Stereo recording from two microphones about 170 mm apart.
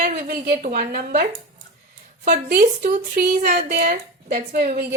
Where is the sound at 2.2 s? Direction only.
50° right (ahead or behind).